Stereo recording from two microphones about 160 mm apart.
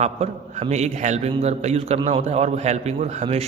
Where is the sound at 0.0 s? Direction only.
45° right (ahead or behind).